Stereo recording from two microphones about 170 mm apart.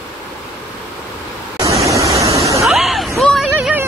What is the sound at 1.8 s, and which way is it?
Waterfall, 20° right (ahead or behind).